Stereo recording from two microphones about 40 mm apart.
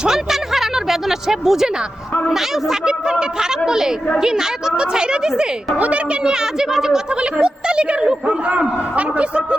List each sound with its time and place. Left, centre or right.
0.0 s a woman's voice: centre
5.7 s a man's voice: right
6.2 s a woman's voice: centre
8.4 s a man's voice: right